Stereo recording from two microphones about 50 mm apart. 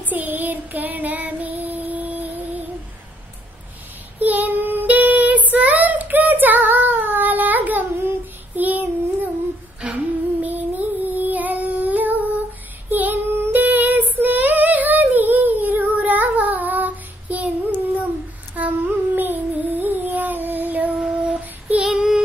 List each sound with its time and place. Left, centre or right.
0.0 s child singing: right
4.2 s child singing: right
9.9 s music: right
12.9 s female singing: right
18.6 s humming: right
21.0 s child singing: right